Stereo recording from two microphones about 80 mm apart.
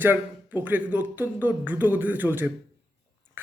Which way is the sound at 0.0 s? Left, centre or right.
Right.